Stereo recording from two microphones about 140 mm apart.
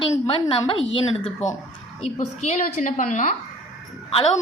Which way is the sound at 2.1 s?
60° left (ahead or behind).